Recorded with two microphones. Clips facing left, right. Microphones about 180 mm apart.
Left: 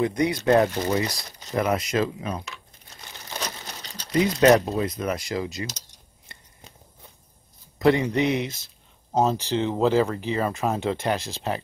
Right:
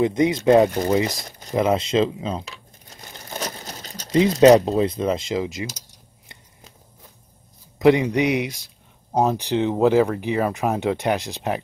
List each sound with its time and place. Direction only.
0.0 s speech: 20° right (ahead or behind)
0.8 s speech: 45° right (ahead or behind)
1.5 s crumpling: 25° right (ahead or behind); by 4.1 s 45° right (ahead or behind)
4.1 s speech: 25° right (ahead or behind); by 6.7 s 10° right (ahead or behind)
7.8 s speech: 15° right (ahead or behind)